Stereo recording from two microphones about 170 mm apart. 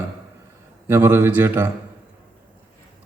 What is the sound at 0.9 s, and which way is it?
Speech, 15° right (ahead or behind).